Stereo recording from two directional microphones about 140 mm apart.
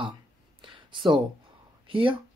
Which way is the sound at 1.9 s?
35° right (ahead or behind).